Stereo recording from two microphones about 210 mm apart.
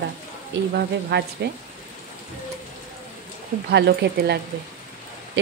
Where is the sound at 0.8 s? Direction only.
50° right (ahead or behind).